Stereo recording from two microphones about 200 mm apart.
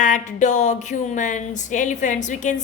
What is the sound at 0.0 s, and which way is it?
A woman's voice, 40° left (ahead or behind).